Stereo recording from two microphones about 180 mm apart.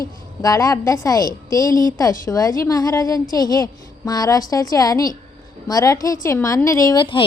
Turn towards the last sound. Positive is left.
turn(degrees=20)  # may be behind; listen again after turning